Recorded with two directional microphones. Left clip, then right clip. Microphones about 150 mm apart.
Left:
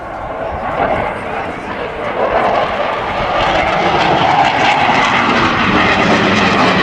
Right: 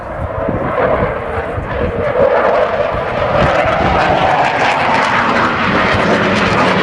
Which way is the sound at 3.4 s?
40° right (ahead or behind).